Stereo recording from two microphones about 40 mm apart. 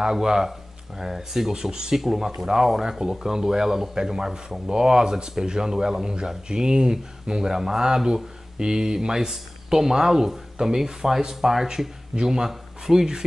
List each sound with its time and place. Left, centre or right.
0.0 s speech: centre